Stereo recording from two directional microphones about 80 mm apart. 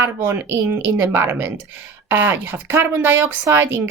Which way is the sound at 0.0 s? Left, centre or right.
Right.